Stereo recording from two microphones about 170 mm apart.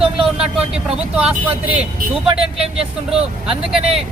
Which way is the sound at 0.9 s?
10° right (ahead or behind).